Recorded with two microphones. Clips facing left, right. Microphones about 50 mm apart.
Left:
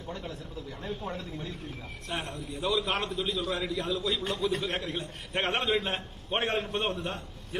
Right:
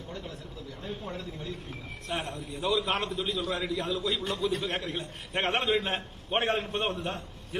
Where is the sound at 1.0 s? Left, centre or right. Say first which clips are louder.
Left 1 dB; left.